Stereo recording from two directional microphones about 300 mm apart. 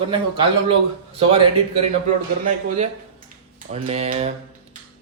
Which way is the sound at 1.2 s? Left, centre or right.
Centre.